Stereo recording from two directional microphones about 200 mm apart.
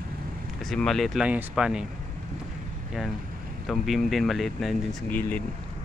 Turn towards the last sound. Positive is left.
turn(degrees=10)  # may be behind; listen again after turning